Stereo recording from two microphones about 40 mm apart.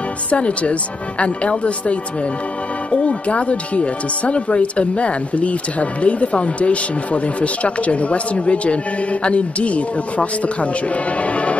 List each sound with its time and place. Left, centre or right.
0.3 s speech: left
11.2 s music: left